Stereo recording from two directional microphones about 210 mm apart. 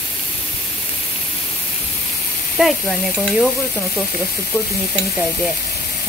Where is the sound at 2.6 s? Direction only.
5° right (ahead or behind).